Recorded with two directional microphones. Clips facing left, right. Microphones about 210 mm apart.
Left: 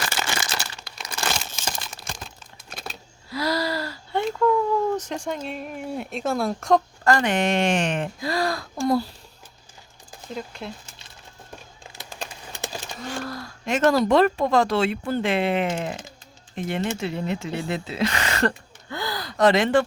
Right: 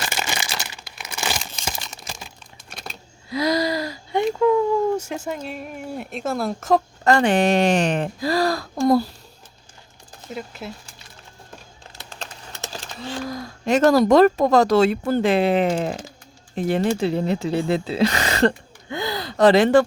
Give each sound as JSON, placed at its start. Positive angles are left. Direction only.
{"t": 0.1, "sound": "crumpling", "side_deg": -15}
{"t": 1.6, "sound": "a sound", "side_deg": -5}
{"t": 3.2, "sound": "gasp", "side_deg": -20}
{"t": 4.9, "sound": "speech", "side_deg": -5}
{"t": 7.0, "sound": "speech", "side_deg": -25}
{"t": 10.2, "sound": "speech", "side_deg": -5}
{"t": 11.9, "sound": "a sound", "side_deg": 10}
{"t": 13.2, "sound": "speech", "side_deg": -20}
{"t": 13.7, "sound": "speech", "side_deg": -40}
{"t": 18.9, "sound": "gasp", "side_deg": -20}